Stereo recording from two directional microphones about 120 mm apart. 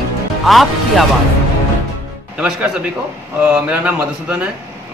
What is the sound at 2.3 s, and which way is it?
Speech, 5° right (ahead or behind).